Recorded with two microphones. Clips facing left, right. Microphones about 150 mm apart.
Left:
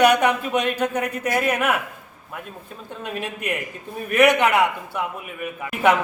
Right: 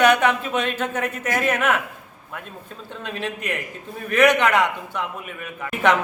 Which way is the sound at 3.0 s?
10° left (ahead or behind).